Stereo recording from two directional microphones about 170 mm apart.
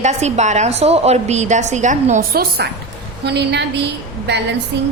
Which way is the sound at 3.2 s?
80° right.